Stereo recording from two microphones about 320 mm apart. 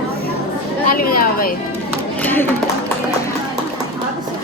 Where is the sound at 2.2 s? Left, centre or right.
Centre.